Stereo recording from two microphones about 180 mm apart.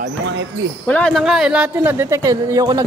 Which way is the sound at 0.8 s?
5° left (ahead or behind).